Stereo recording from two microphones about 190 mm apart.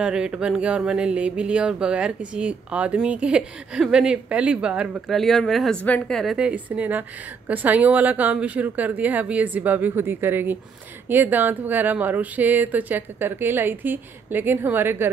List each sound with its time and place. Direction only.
0.0 s a woman's voice: 5° right (ahead or behind)